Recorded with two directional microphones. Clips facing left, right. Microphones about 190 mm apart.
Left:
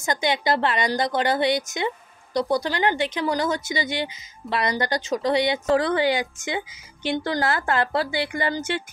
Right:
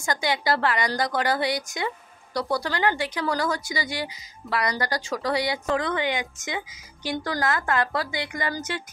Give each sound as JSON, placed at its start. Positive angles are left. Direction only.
{"t": 0.0, "sound": "speech", "side_deg": 20}
{"t": 5.7, "sound": "a woman's voice", "side_deg": 35}